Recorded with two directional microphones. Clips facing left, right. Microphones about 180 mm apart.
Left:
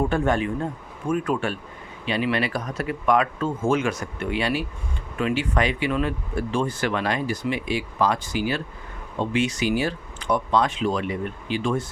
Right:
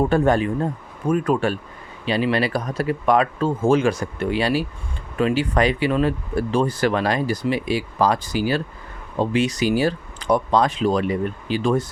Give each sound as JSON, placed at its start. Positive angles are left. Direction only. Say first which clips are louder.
{"t": 0.0, "sound": "speech", "louder": "right 4 dB", "side_deg": -35}